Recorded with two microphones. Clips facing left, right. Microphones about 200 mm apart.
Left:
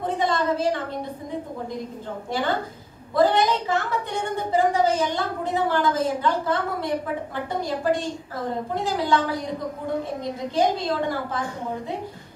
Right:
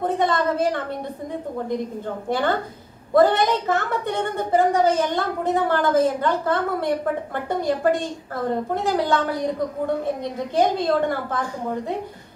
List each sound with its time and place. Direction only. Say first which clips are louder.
0.0 s a woman's voice: right 3 dB; 50° right (ahead or behind)
2.2 s a woman's voice: right 3 dB; 50° right (ahead or behind)
10.5 s a woman's voice: right 3 dB; 55° right (ahead or behind)